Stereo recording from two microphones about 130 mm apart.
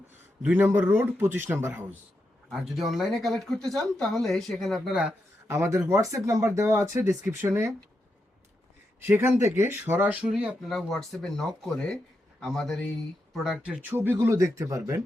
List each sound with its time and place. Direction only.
0.4 s speech: 15° right (ahead or behind)
2.5 s speech: centre (ahead or behind)
5.5 s speech: 20° right (ahead or behind)
9.0 s speech: 15° right (ahead or behind)
13.9 s speech: 15° right (ahead or behind)